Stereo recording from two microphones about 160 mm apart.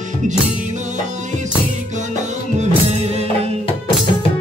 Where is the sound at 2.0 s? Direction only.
45° right (ahead or behind).